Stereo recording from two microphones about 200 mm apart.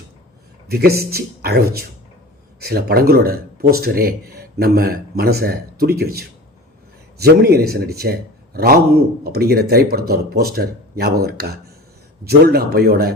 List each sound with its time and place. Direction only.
0.7 s speech: 50° right (ahead or behind)